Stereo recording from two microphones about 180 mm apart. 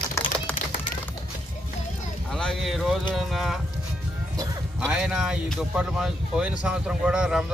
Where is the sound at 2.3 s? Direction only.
Centre (ahead or behind).